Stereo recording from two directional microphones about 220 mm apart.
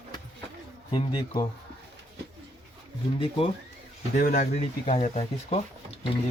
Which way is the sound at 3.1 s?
25° left (ahead or behind).